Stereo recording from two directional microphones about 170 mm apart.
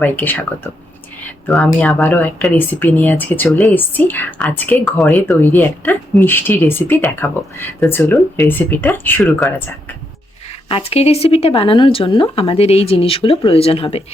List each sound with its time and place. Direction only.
0.0 s speech: 10° left (ahead or behind)
1.5 s speech: 10° left (ahead or behind)
10.7 s speech: 35° left (ahead or behind)